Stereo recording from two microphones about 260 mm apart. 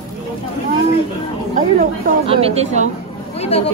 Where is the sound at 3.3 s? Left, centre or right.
Left.